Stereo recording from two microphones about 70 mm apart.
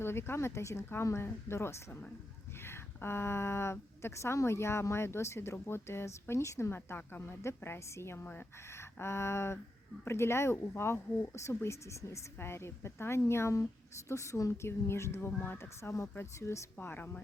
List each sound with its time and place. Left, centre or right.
0.0 s a woman's voice: left
6.7 s a woman's voice: left
8.6 s a sound: left
10.0 s a woman's voice: left
16.8 s a woman's voice: left